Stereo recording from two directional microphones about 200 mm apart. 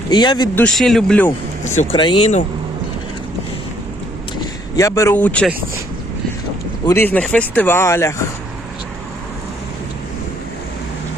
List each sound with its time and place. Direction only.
0.1 s speech: 20° left (ahead or behind)
0.6 s speech: centre (ahead or behind)
1.6 s speech: 35° left (ahead or behind)
2.0 s speech: 25° left (ahead or behind)
4.8 s speech: 15° left (ahead or behind)
6.8 s speech: 10° left (ahead or behind)